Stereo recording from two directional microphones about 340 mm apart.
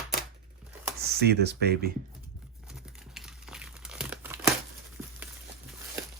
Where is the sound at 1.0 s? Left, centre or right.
Right.